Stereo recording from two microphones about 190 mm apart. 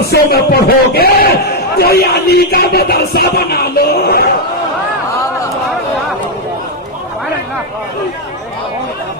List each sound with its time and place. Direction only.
0.1 s speech: 55° left (ahead or behind)